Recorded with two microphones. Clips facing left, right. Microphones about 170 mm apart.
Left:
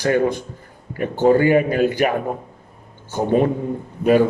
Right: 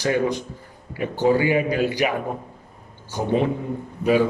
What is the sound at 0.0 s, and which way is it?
Speech, 50° left (ahead or behind).